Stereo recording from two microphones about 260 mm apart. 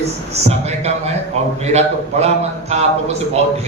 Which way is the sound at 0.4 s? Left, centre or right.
Right.